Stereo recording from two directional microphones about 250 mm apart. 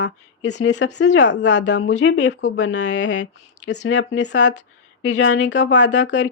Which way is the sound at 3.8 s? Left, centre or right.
Left.